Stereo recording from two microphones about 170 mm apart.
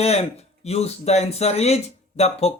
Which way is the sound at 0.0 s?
40° left (ahead or behind).